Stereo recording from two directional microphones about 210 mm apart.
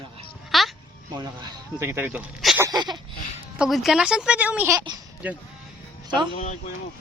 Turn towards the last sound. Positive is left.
turn(degrees=35)  # may be behind; listen again after turning